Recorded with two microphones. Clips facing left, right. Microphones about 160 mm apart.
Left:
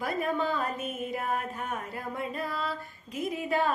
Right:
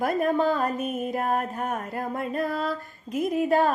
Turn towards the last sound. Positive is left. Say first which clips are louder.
# right 6 dB
turn(degrees=-45)  # may be behind; listen again after turning